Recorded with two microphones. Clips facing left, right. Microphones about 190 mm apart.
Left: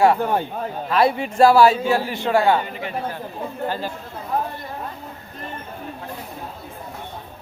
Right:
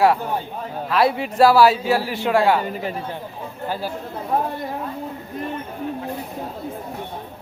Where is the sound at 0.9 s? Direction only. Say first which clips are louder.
Even; centre (ahead or behind).